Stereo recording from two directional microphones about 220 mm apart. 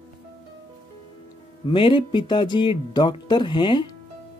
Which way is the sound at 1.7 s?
20° left (ahead or behind).